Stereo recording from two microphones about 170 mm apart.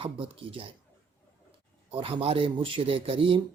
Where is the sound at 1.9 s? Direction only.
30° right (ahead or behind).